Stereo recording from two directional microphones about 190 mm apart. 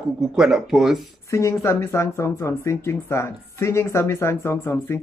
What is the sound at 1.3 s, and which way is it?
Speech, 15° left (ahead or behind).